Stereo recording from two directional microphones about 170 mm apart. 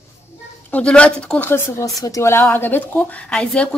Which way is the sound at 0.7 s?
5° left (ahead or behind).